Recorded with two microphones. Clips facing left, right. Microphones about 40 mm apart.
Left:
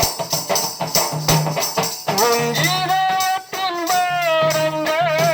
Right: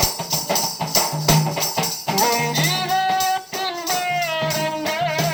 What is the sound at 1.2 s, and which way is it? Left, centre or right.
Music, centre.